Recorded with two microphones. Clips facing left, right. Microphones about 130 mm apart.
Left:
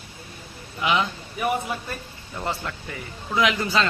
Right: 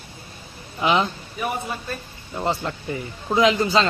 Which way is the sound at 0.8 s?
30° right (ahead or behind).